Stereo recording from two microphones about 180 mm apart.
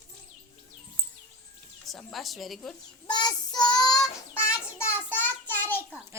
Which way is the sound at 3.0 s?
25° left (ahead or behind).